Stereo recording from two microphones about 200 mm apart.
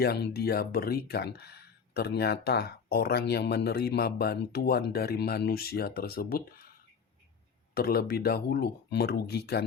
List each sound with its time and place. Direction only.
0.0 s speech: 55° left (ahead or behind)
7.7 s speech: 50° left (ahead or behind)